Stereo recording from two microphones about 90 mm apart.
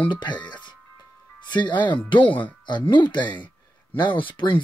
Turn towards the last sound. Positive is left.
turn(degrees=70)  # may be behind; listen again after turning